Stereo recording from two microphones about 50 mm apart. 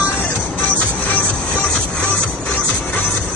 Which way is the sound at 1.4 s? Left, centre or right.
Centre.